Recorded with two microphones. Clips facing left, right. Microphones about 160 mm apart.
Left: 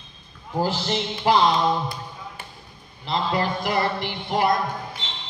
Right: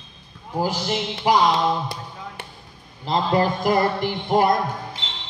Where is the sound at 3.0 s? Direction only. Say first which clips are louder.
Right 4 dB; 40° right (ahead or behind).